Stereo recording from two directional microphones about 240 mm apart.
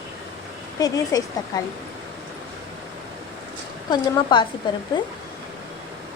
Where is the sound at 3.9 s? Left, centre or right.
Centre.